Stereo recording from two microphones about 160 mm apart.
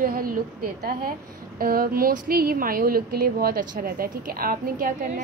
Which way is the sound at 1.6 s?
65° right (ahead or behind).